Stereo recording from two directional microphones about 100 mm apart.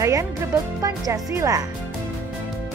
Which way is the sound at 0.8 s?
35° right (ahead or behind).